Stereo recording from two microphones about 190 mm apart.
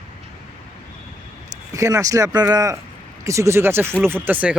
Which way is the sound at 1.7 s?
15° right (ahead or behind).